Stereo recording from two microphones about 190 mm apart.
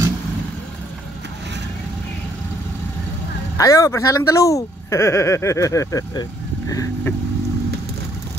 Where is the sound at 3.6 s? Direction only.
15° left (ahead or behind).